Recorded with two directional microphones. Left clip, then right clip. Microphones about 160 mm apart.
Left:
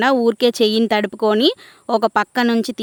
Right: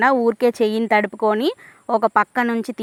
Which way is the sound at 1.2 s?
25° left (ahead or behind).